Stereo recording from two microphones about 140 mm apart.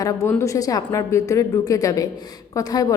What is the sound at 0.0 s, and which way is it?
Speech, 25° left (ahead or behind).